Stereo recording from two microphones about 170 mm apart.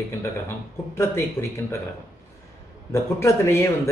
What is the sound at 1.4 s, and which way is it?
Speech, 15° left (ahead or behind).